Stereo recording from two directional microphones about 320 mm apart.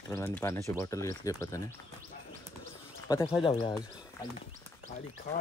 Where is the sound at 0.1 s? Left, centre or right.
Centre.